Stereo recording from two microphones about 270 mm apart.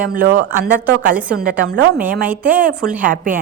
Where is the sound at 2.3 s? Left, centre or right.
Centre.